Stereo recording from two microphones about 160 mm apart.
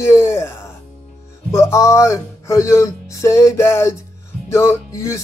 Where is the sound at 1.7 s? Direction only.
15° left (ahead or behind).